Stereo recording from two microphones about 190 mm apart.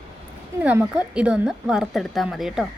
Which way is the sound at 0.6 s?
5° right (ahead or behind).